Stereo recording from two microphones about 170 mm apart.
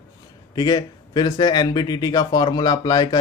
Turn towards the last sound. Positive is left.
turn(degrees=25)  # may be behind; listen again after turning